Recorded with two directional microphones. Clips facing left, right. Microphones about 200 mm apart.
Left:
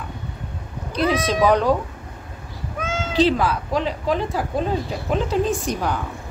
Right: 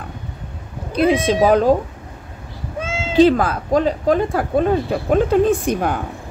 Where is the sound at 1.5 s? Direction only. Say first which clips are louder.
Right 4 dB; 45° right (ahead or behind).